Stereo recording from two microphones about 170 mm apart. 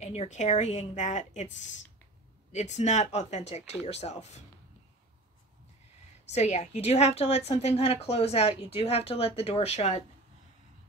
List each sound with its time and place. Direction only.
0.0 s a woman's voice: 40° left (ahead or behind)
6.3 s a woman's voice: 40° left (ahead or behind)